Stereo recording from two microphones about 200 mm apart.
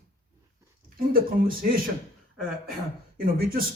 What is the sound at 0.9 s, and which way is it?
Speech, 45° right (ahead or behind).